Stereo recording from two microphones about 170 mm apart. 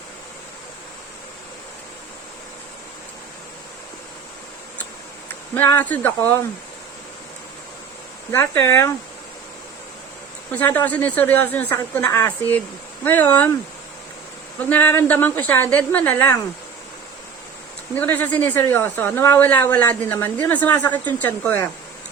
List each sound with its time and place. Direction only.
5.5 s a woman's voice: 10° left (ahead or behind)
8.3 s a woman's voice: 15° left (ahead or behind)
10.5 s a woman's voice: 10° left (ahead or behind)
14.6 s a woman's voice: 10° left (ahead or behind)
18.0 s a woman's voice: 10° left (ahead or behind)